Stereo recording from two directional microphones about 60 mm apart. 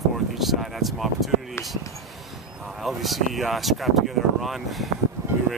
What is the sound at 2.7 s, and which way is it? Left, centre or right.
Speech, centre.